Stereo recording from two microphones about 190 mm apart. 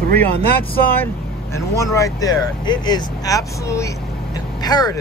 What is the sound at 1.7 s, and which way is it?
Speech, 15° left (ahead or behind).